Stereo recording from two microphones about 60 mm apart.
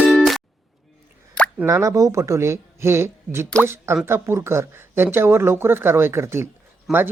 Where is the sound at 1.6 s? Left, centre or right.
Right.